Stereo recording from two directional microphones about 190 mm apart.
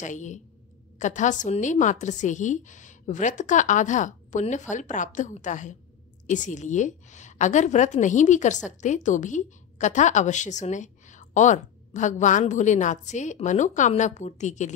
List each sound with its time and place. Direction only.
0.0 s a woman's voice: 40° left (ahead or behind)